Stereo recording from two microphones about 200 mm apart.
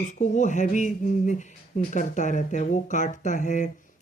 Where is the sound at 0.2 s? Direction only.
35° left (ahead or behind).